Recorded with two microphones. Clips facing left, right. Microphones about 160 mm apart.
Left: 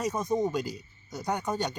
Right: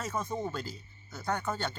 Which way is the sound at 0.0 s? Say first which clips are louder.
Left 7 dB; 15° left (ahead or behind).